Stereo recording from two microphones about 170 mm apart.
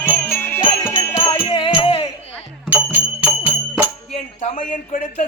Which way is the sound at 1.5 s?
30° left (ahead or behind).